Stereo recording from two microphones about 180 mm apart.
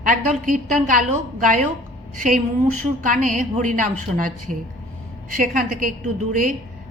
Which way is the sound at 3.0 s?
45° right (ahead or behind).